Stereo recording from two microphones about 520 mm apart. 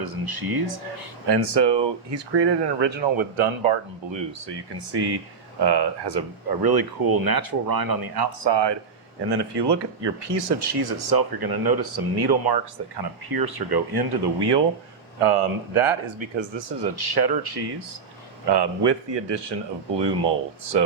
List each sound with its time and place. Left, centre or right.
0.0 s speech: right
15.2 s speech: right